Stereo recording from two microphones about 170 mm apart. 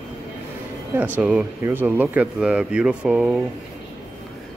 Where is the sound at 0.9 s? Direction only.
10° right (ahead or behind).